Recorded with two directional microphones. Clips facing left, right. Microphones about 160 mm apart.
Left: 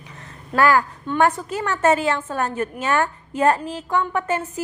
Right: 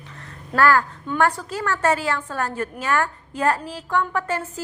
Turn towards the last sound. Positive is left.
turn(degrees=20)  # may be behind; listen again after turning